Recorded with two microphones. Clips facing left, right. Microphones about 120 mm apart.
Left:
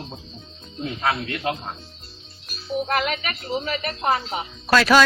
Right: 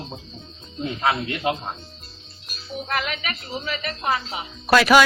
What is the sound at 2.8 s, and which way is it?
A woman's voice, 45° left (ahead or behind).